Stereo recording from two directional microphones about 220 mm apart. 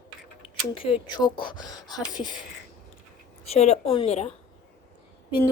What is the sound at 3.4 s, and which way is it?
Speech, 30° left (ahead or behind).